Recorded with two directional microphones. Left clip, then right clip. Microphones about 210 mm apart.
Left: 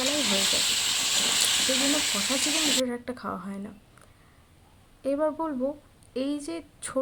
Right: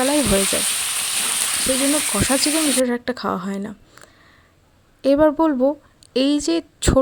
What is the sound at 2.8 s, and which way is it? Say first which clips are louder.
Speech: right 9 dB; 40° right (ahead or behind).